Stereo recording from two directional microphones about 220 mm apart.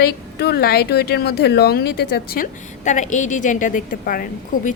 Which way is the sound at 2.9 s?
35° left (ahead or behind).